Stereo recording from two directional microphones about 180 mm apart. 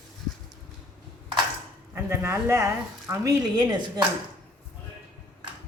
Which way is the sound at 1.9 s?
15° right (ahead or behind).